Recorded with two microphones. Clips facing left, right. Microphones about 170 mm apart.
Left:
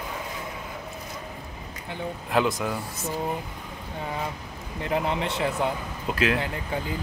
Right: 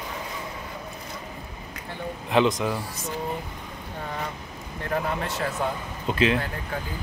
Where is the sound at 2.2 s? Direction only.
5° left (ahead or behind).